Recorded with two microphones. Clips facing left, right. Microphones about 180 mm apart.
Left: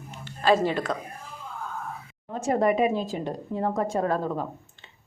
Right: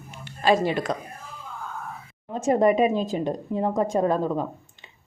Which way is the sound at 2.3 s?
20° right (ahead or behind).